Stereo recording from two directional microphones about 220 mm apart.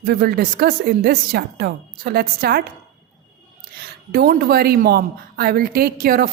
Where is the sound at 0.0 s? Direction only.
45° right (ahead or behind).